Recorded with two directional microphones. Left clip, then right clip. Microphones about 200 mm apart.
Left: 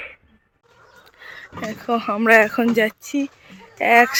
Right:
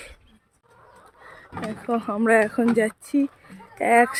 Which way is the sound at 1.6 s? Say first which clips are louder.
Left 4 dB; 5° right (ahead or behind).